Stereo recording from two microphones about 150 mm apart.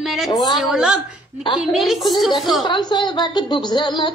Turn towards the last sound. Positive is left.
turn(degrees=30)  # may be behind; listen again after turning